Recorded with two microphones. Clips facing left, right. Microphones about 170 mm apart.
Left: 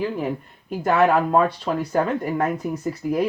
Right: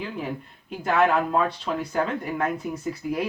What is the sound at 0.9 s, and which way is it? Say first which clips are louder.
Speech: left 3 dB; 45° left (ahead or behind).